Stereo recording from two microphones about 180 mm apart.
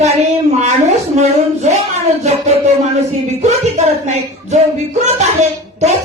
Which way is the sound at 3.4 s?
40° right (ahead or behind).